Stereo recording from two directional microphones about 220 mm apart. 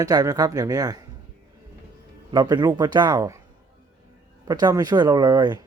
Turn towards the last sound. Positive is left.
turn(degrees=-20)  # may be behind; listen again after turning